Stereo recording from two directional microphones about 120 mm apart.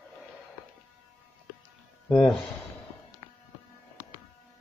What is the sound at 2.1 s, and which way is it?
Speech, 5° left (ahead or behind).